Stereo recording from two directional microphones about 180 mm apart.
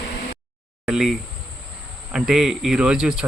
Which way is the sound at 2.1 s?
Centre (ahead or behind).